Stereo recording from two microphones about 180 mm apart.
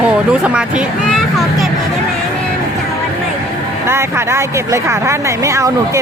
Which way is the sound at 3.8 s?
15° right (ahead or behind).